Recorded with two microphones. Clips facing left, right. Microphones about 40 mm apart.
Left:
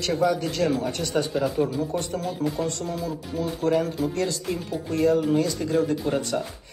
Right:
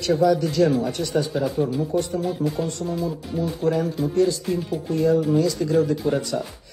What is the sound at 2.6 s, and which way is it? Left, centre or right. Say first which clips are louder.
Speech: right 1 dB; left.